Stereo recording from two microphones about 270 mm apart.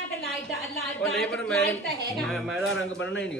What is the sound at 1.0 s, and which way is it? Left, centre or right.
A man's voice, centre.